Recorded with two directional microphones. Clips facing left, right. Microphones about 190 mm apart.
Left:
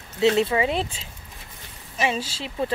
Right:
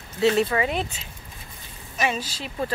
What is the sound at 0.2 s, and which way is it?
Speech, 20° left (ahead or behind).